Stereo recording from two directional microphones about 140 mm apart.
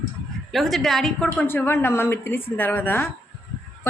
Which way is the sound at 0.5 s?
Centre (ahead or behind).